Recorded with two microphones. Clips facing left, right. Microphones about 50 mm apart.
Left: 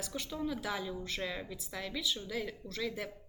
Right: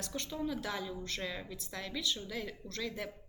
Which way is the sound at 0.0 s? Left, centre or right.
Centre.